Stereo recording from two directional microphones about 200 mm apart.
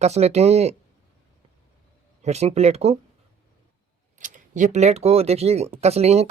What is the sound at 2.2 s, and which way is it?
Speech, 35° right (ahead or behind).